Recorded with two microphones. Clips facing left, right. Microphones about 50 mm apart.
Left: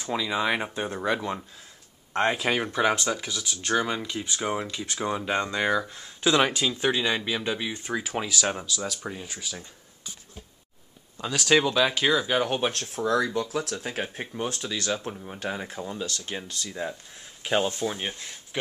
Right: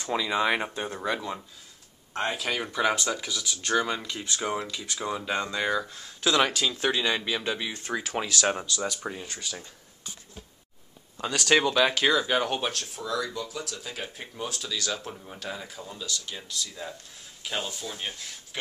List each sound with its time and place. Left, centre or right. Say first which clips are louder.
0.1 s speech: right 1 dB; centre
2.5 s speech: left 2 dB; centre
4.6 s speech: left 3 dB; left; by 10.1 s centre
11.2 s speech: left 1 dB; centre
12.9 s speech: left 6 dB; left
16.6 s speech: left 6 dB; left
17.6 s speech: left 8 dB; left
17.9 s speech: left 3 dB; left